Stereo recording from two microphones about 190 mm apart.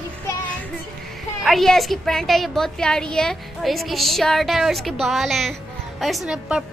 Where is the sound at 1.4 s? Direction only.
Centre (ahead or behind).